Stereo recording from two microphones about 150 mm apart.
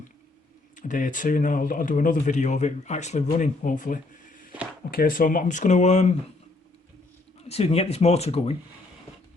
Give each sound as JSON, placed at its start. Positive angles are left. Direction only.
{"t": 0.8, "sound": "speech", "side_deg": 60}
{"t": 4.9, "sound": "speech", "side_deg": 70}
{"t": 7.4, "sound": "speech", "side_deg": 40}